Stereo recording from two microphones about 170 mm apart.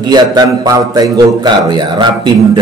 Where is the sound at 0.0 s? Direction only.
25° right (ahead or behind).